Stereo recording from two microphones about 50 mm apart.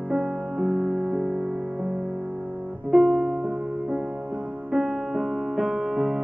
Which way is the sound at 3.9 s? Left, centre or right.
Centre.